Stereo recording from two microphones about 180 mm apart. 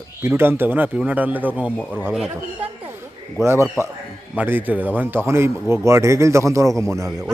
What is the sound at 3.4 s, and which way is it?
A man's voice, 15° right (ahead or behind).